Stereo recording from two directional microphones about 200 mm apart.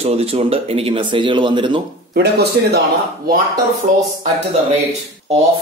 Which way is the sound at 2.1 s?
55° right (ahead or behind).